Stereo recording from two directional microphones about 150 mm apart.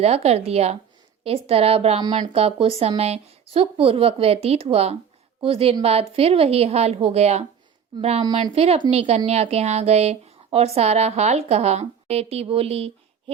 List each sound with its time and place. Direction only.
0.0 s speech: 45° right (ahead or behind)
2.0 s speech: 30° right (ahead or behind); by 7.4 s 45° right (ahead or behind)
8.2 s speech: 35° right (ahead or behind)